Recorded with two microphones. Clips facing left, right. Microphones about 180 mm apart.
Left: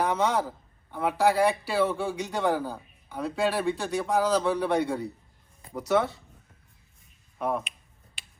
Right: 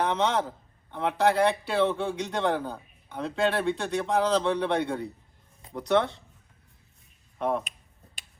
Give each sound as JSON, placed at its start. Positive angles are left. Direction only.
{"t": 0.0, "sound": "a man's voice", "side_deg": 10}
{"t": 7.3, "sound": "speech", "side_deg": 0}
{"t": 8.2, "sound": "tick-tock", "side_deg": -40}